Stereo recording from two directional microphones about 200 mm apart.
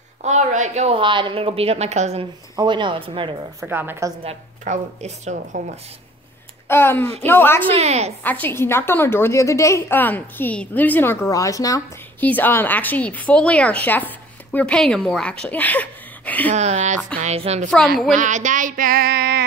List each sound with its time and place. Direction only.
0.2 s a woman's voice: 35° right (ahead or behind)
2.5 s speech: 20° right (ahead or behind)
3.6 s a woman's voice: 10° right (ahead or behind)
4.2 s a woman's voice: 30° right (ahead or behind)
6.7 s a woman's voice: 10° left (ahead or behind)
7.7 s a woman's voice: 35° right (ahead or behind)
8.2 s a woman's voice: 10° left (ahead or behind)
16.5 s a woman's voice: 35° right (ahead or behind)
17.6 s a woman's voice: centre (ahead or behind)
18.1 s a woman's voice: 40° right (ahead or behind)